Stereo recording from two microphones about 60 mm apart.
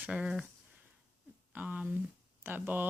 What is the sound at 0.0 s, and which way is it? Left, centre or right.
Speech, centre.